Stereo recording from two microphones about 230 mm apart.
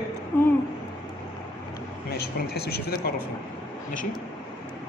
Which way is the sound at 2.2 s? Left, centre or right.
Left.